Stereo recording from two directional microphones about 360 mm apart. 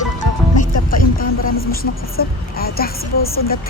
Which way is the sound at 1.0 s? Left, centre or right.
Left.